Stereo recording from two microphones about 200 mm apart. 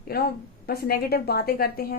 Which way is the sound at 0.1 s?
50° left (ahead or behind).